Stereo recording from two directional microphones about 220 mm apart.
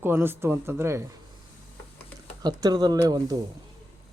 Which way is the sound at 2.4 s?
15° right (ahead or behind).